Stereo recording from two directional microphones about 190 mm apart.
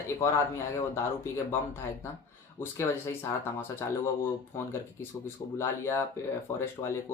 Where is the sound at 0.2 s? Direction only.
15° left (ahead or behind).